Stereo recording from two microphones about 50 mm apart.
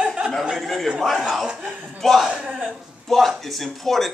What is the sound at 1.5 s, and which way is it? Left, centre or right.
Speech, centre.